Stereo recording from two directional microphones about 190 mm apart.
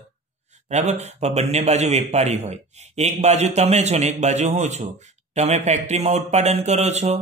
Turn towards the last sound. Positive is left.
turn(degrees=-35)  # may be behind; listen again after turning